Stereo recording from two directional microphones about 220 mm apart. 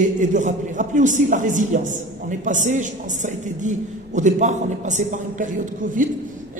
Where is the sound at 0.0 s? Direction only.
35° right (ahead or behind).